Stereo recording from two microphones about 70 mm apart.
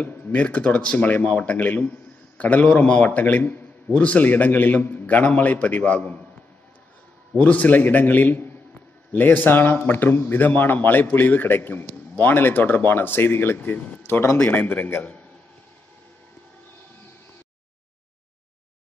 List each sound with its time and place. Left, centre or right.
0.0 s a man's voice: left
7.3 s a man's voice: left